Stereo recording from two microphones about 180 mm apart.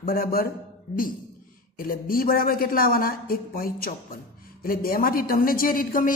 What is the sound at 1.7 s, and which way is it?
A man's voice, 55° left (ahead or behind).